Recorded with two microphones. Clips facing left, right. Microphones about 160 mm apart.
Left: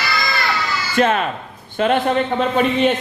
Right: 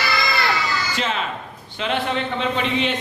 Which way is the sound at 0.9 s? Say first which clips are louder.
Left 8 dB; 55° left (ahead or behind).